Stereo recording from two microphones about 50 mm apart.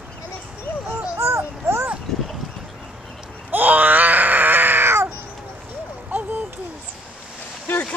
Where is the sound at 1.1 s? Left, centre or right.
Right.